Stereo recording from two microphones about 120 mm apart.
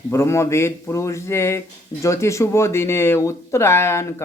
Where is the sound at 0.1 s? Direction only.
25° left (ahead or behind).